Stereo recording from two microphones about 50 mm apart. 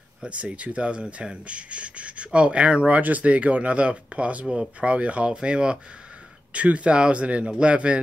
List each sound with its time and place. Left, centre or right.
0.2 s speech: right